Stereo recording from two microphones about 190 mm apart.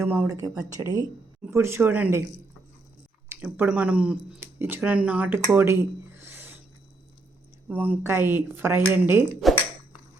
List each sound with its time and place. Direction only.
0.0 s speech: 15° right (ahead or behind)
3.2 s speech: 10° right (ahead or behind)
7.7 s speech: 10° right (ahead or behind)
9.3 s speech: centre (ahead or behind)